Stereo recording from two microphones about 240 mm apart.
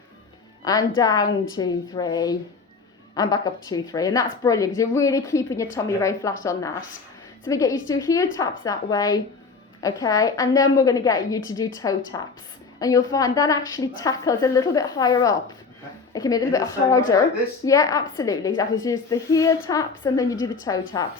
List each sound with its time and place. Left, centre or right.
0.6 s a woman's voice: centre
20.3 s a woman's voice: left
20.9 s a woman's voice: centre